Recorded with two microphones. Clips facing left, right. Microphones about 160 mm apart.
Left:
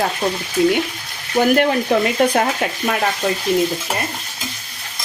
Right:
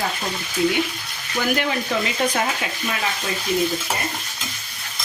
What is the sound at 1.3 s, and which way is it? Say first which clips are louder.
Speech: left 8 dB; 50° left (ahead or behind).